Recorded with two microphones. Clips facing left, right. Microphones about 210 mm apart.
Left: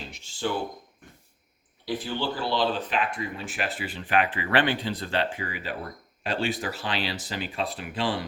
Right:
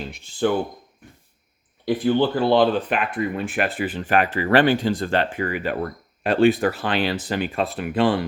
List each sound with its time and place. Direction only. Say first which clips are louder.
0.1 s speech: right 8 dB; 55° right (ahead or behind)
1.8 s speech: right 11 dB; 55° right (ahead or behind)